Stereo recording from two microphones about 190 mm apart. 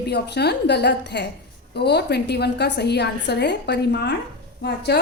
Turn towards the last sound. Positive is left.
turn(degrees=60)  # may be behind; listen again after turning